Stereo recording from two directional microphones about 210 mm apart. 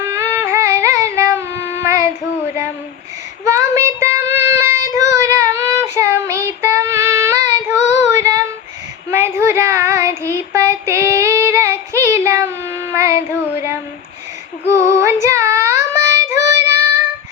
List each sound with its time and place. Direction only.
0.0 s music: 10° right (ahead or behind)
3.4 s child singing: 15° right (ahead or behind)
9.0 s a sound: 10° right (ahead or behind)
9.4 s child singing: 15° right (ahead or behind)
14.6 s female singing: 30° left (ahead or behind)
15.0 s child singing: 15° right (ahead or behind)